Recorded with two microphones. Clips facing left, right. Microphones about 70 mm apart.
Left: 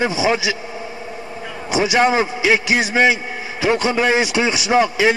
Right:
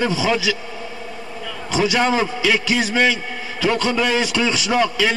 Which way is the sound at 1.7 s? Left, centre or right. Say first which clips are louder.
Left 2 dB; centre.